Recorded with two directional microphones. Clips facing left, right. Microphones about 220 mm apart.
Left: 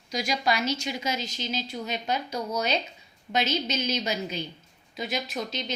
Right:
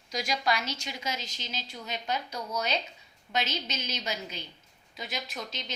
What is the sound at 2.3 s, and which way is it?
Speech, 30° left (ahead or behind).